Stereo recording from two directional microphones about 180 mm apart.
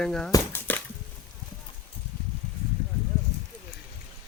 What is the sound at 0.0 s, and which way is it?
Speech, 5° left (ahead or behind).